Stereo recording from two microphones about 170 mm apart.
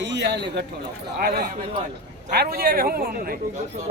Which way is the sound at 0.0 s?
90° right.